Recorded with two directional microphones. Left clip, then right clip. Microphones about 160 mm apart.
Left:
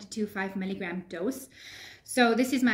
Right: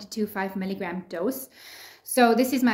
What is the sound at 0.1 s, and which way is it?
A woman's voice, 30° left (ahead or behind).